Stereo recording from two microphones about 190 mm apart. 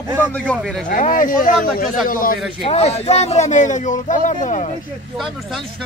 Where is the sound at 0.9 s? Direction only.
45° left (ahead or behind).